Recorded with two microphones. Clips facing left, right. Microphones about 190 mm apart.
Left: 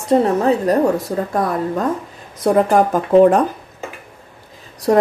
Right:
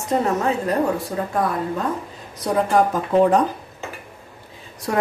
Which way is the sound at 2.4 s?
50° left (ahead or behind).